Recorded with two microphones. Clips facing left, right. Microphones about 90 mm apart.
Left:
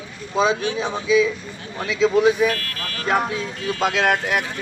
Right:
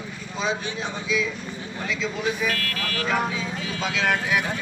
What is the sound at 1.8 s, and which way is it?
Speech, 65° left (ahead or behind).